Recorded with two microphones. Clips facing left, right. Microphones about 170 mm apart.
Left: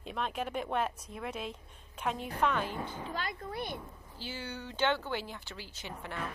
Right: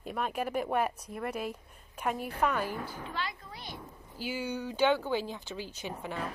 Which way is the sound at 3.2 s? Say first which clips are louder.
Left 2 dB; 50° left (ahead or behind).